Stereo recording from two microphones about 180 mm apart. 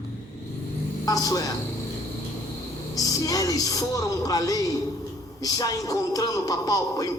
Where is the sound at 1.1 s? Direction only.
20° left (ahead or behind).